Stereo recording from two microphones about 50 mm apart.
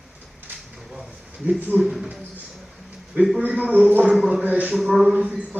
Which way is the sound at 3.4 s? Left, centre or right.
Right.